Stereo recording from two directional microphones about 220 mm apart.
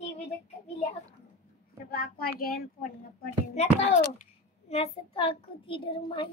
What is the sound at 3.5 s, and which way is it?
A child's voice, 30° left (ahead or behind).